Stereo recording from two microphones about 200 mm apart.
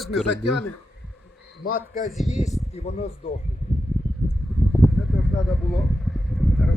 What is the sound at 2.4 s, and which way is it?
Speech, 30° left (ahead or behind).